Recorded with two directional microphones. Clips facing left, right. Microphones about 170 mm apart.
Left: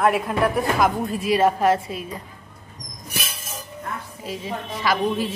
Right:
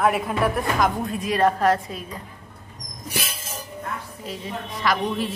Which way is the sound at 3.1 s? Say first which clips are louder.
Right 2 dB; 25° right (ahead or behind).